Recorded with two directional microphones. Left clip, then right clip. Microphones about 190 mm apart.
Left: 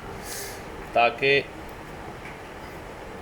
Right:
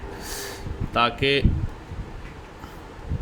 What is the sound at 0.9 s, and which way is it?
Speech, 30° right (ahead or behind).